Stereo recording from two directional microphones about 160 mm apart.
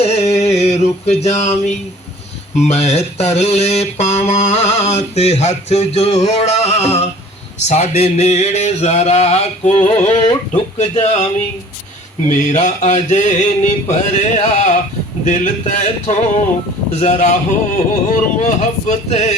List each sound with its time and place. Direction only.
0.0 s a sound: 40° left (ahead or behind)
2.6 s mantra: 45° left (ahead or behind)
12.3 s mantra: 50° left (ahead or behind)